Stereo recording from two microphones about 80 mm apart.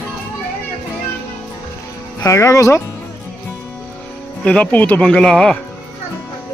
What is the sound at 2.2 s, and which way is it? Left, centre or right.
Speech, left.